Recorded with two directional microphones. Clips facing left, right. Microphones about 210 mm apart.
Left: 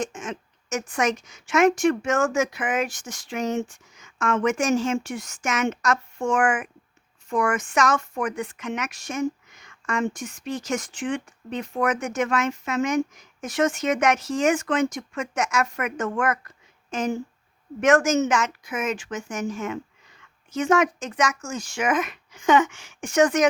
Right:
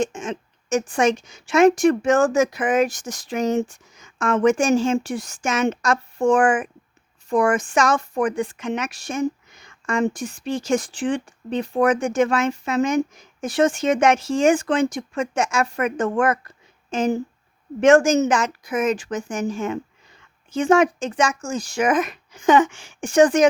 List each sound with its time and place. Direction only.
0.0 s a woman's voice: 30° right (ahead or behind)